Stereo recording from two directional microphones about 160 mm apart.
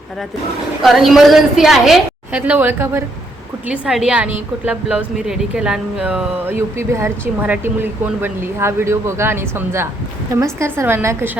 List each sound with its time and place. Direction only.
0.8 s a woman's voice: centre (ahead or behind)
3.7 s a woman's voice: 5° right (ahead or behind)